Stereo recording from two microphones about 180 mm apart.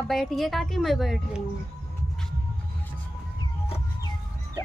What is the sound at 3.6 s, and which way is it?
Music, 35° left (ahead or behind).